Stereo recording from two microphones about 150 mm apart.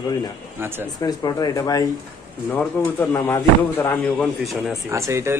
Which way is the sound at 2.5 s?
10° left (ahead or behind).